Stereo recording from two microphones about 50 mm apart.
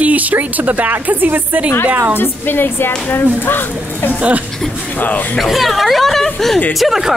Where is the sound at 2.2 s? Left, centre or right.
Left.